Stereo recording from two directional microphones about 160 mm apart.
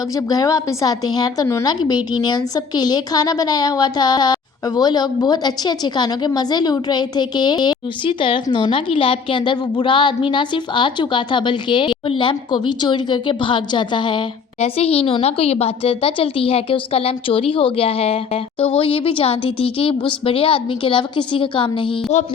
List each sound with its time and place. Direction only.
0.3 s a woman's voice: 20° left (ahead or behind)